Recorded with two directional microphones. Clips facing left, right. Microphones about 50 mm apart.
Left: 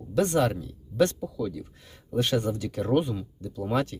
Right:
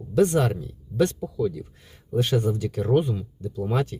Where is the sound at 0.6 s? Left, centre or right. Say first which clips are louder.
Right 1 dB; centre.